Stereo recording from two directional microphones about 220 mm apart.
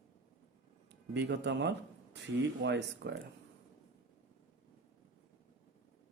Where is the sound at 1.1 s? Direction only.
50° right (ahead or behind).